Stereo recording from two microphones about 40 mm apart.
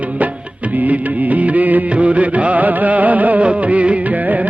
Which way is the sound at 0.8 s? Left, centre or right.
Right.